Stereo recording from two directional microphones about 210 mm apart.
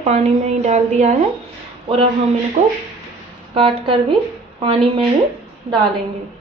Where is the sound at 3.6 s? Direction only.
25° right (ahead or behind).